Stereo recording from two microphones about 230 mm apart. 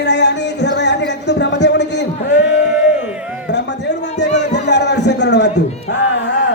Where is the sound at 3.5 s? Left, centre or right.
Left.